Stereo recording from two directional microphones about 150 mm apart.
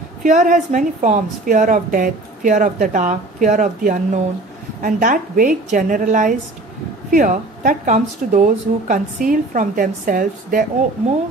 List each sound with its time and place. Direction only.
0.2 s a woman's voice: 60° right (ahead or behind)